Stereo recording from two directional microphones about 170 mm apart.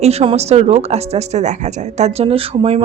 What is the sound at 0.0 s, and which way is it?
Speech, 35° right (ahead or behind).